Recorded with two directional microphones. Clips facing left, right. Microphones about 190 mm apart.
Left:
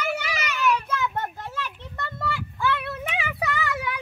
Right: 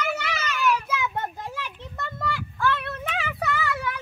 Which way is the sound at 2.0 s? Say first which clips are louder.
Even; centre (ahead or behind).